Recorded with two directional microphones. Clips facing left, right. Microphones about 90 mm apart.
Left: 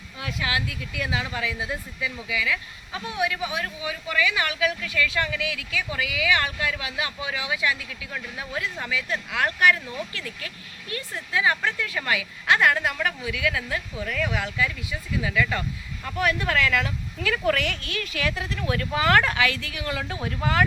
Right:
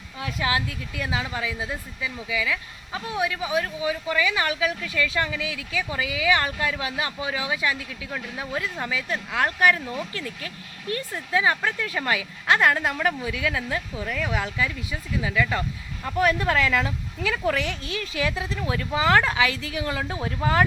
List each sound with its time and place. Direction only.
0.2 s speech: 35° right (ahead or behind)
15.3 s speech: 20° right (ahead or behind)
16.0 s speech: 30° right (ahead or behind)
17.2 s a woman's voice: 10° right (ahead or behind)
17.7 s speech: 25° right (ahead or behind)